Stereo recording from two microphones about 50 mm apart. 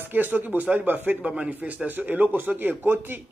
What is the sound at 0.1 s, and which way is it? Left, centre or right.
Speech, right.